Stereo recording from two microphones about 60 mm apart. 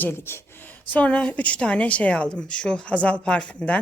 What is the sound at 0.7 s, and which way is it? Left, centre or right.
Speech, left.